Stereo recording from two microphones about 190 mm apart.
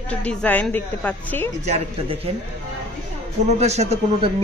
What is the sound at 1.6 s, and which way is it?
Speech, 35° right (ahead or behind).